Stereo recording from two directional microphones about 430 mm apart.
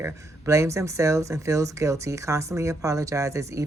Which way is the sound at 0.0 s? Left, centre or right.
Centre.